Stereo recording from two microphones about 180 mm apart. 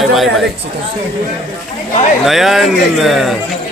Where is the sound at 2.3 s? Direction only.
Centre (ahead or behind).